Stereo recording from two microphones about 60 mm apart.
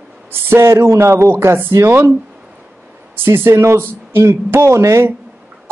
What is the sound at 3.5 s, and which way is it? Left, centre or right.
Speech, right.